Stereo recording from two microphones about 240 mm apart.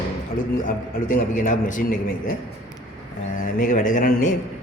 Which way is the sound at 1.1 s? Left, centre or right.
Left.